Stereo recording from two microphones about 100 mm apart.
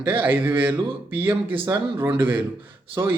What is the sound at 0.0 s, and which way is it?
Speech, 20° right (ahead or behind).